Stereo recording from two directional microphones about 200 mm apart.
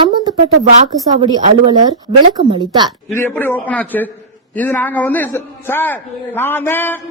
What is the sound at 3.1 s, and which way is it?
A man's voice, 10° left (ahead or behind).